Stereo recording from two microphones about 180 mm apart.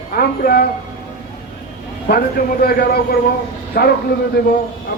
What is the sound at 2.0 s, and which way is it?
A man's voice, 60° left (ahead or behind).